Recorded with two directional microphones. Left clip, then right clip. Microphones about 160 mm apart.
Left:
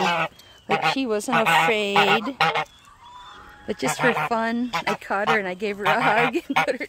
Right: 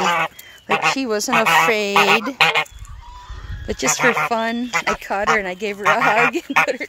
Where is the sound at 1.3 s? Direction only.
25° left (ahead or behind).